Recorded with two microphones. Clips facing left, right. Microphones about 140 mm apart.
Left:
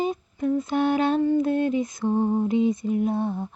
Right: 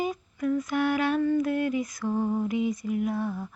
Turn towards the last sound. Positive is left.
turn(degrees=25)  # may be behind; listen again after turning